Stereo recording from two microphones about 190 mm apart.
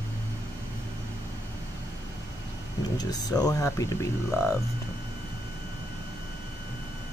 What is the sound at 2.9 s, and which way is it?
Speech, 20° left (ahead or behind).